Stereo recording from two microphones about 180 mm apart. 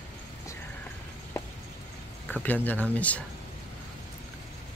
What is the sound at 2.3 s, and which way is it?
Speech, 10° left (ahead or behind).